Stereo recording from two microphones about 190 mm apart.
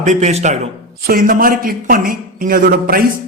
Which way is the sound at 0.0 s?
40° right (ahead or behind).